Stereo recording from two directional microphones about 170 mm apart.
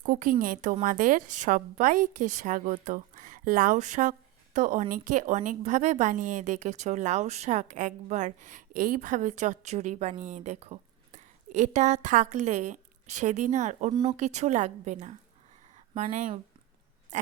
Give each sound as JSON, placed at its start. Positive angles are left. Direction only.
{"t": 0.0, "sound": "a woman's voice", "side_deg": -50}